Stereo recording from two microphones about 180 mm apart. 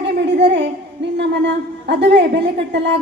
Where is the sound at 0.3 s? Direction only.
75° right (ahead or behind).